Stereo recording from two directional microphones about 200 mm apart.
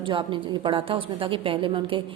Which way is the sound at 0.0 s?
25° right (ahead or behind).